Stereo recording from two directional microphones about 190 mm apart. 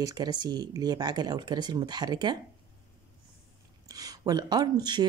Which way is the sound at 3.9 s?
20° right (ahead or behind).